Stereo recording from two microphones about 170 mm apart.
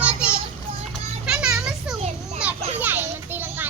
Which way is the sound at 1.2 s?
5° right (ahead or behind).